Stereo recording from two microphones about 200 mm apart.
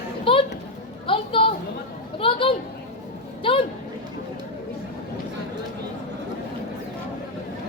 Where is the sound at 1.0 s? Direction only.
25° left (ahead or behind).